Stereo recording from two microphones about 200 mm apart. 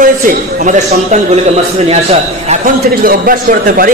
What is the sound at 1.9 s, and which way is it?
Speech, 30° right (ahead or behind).